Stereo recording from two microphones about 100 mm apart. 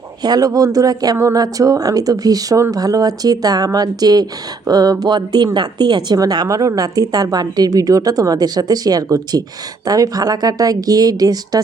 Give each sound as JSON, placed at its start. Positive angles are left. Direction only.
{"t": 0.2, "sound": "speech", "side_deg": -40}